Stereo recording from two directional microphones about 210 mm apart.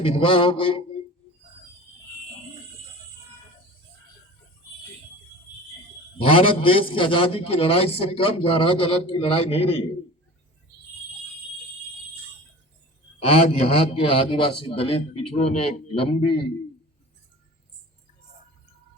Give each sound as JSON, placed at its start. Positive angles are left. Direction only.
{"t": 0.0, "sound": "a man's voice", "side_deg": 25}
{"t": 6.2, "sound": "a man's voice", "side_deg": 25}
{"t": 13.1, "sound": "a man's voice", "side_deg": 30}